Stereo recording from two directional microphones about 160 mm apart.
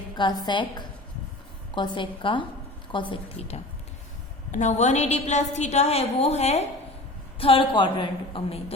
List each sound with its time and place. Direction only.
0.2 s a woman's voice: 25° left (ahead or behind)